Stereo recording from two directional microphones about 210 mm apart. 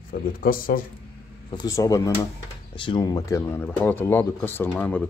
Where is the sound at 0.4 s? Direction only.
40° left (ahead or behind).